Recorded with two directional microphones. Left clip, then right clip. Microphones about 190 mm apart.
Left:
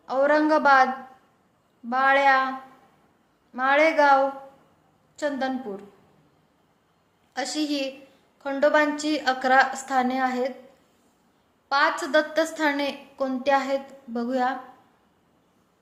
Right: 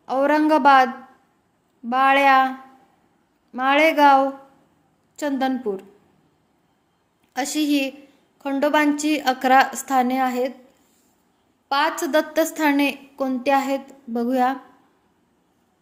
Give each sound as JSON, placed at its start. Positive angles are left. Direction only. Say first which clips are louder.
{"t": 0.0, "sound": "a woman's voice", "louder": "right 2 dB", "side_deg": -40}
{"t": 1.9, "sound": "a woman's voice", "louder": "right 4 dB", "side_deg": -40}
{"t": 3.5, "sound": "a woman's voice", "louder": "right 2 dB", "side_deg": -40}
{"t": 7.3, "sound": "a woman's voice", "louder": "right 5 dB", "side_deg": -40}
{"t": 11.7, "sound": "a woman's voice", "louder": "right 1 dB", "side_deg": -40}